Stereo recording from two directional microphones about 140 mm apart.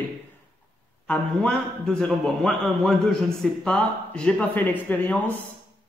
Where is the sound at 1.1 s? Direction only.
5° left (ahead or behind).